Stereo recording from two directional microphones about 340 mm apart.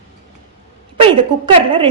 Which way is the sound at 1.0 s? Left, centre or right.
Centre.